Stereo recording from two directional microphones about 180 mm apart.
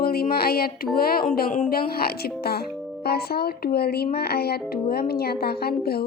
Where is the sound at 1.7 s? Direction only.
60° left (ahead or behind).